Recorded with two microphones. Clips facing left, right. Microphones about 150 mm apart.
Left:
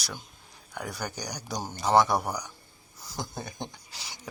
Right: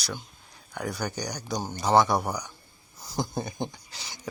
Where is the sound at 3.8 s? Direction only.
5° left (ahead or behind).